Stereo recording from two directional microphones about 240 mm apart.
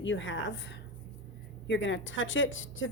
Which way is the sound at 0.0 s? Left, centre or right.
Left.